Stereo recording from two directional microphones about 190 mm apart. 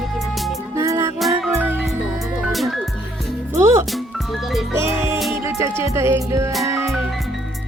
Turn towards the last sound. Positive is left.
turn(degrees=-15)  # may be behind; listen again after turning